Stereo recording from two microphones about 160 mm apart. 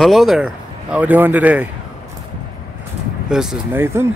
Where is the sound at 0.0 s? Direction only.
Centre (ahead or behind).